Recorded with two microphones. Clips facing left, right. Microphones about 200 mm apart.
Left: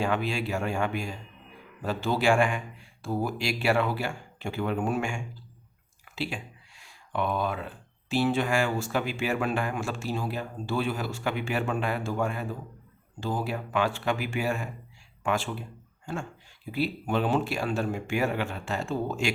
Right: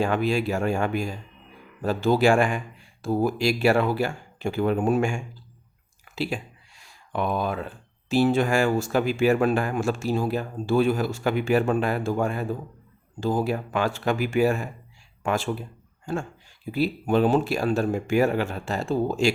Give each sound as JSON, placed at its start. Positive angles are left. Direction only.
{"t": 0.0, "sound": "speech", "side_deg": -40}
{"t": 6.1, "sound": "a sound", "side_deg": -40}
{"t": 8.1, "sound": "speech", "side_deg": -45}
{"t": 16.7, "sound": "speech", "side_deg": -40}